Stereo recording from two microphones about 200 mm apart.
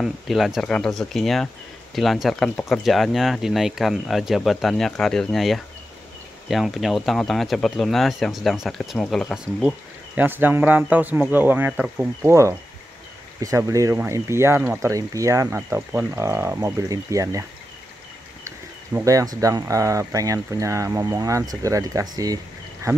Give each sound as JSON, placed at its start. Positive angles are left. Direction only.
{"t": 0.0, "sound": "speech", "side_deg": 0}
{"t": 18.9, "sound": "speech", "side_deg": -15}